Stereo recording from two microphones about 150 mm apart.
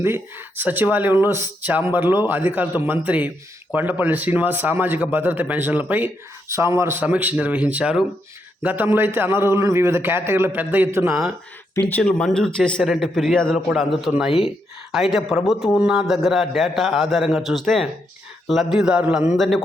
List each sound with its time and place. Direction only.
0.0 s a man's voice: 15° right (ahead or behind)
11.7 s a man's voice: 10° left (ahead or behind)